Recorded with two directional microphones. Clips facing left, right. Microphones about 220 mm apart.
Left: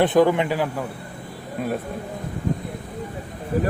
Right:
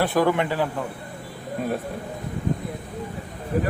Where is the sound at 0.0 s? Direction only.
20° left (ahead or behind).